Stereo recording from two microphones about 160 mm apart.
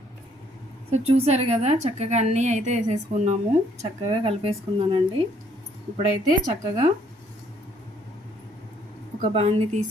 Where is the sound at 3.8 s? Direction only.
35° right (ahead or behind).